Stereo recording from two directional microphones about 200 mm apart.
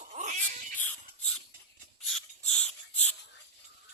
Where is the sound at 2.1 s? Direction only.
5° left (ahead or behind).